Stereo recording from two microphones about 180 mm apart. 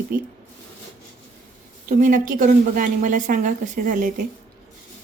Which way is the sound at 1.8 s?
50° right (ahead or behind).